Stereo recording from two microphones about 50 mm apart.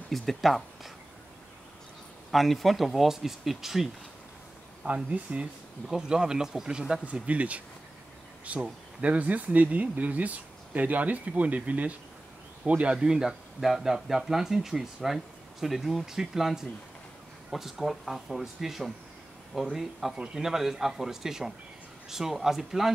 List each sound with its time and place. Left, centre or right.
0.1 s speech: centre
2.3 s speech: centre
4.8 s speech: right
5.9 s speech: centre
7.2 s speech: right; by 22.8 s centre